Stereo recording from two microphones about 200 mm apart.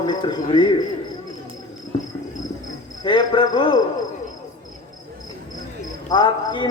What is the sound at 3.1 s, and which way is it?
Speech, 20° left (ahead or behind).